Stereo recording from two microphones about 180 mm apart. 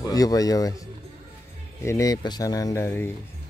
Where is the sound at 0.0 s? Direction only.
20° left (ahead or behind).